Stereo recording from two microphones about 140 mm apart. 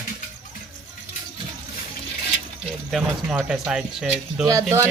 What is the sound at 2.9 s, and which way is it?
Speech, 5° right (ahead or behind).